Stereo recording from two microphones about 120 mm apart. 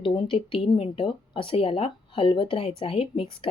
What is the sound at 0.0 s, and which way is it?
Speech, 45° left (ahead or behind).